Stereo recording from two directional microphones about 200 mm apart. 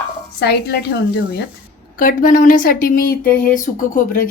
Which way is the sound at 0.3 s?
55° left (ahead or behind).